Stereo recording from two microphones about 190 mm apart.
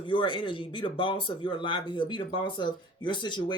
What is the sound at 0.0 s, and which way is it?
Speech, 25° left (ahead or behind).